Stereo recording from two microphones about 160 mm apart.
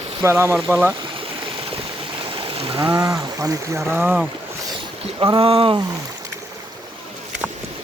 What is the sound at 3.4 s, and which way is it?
Speech, 20° right (ahead or behind).